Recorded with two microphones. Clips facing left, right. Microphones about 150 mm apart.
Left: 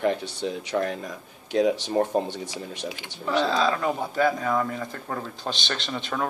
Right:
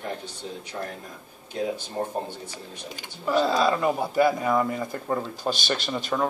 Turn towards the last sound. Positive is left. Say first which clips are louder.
# right 3 dB
turn(degrees=-5)  # may be behind; listen again after turning